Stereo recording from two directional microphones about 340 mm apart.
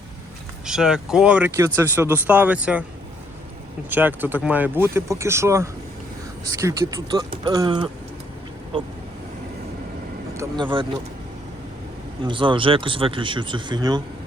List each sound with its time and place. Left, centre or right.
0.6 s speech: centre
3.8 s speech: centre
10.3 s speech: centre
12.2 s speech: centre